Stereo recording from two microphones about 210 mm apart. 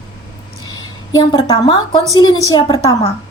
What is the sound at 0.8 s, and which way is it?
A woman's voice, 20° left (ahead or behind).